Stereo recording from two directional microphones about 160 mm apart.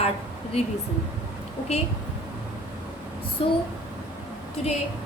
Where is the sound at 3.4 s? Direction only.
35° left (ahead or behind).